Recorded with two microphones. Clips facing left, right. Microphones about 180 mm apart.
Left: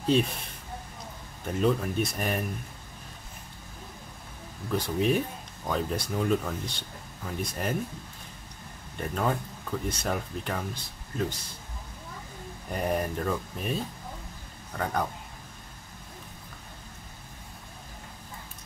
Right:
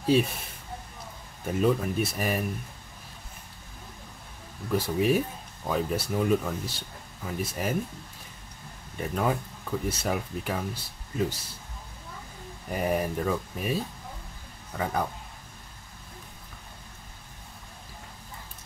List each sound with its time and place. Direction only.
0.0 s speech: 5° right (ahead or behind)
1.4 s speech: 5° right (ahead or behind)
4.7 s speech: 5° right (ahead or behind)
8.9 s speech: 5° right (ahead or behind)
12.7 s speech: 5° right (ahead or behind)